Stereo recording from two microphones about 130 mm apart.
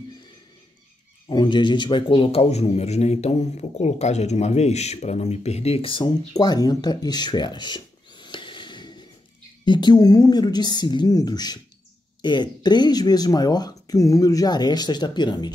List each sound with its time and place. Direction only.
1.3 s a man's voice: 35° left (ahead or behind)
6.3 s a sound: 30° left (ahead or behind)
9.7 s speech: 35° left (ahead or behind)